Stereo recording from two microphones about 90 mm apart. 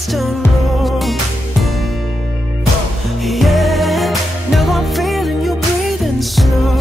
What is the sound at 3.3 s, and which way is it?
Music, centre (ahead or behind).